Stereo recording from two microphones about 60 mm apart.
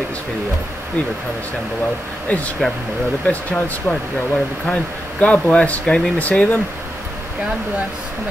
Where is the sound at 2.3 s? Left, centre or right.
Left.